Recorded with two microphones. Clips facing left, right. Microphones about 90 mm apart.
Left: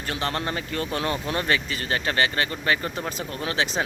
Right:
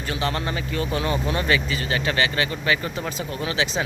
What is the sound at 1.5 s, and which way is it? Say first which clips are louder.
Speech: right 2 dB; 45° left (ahead or behind).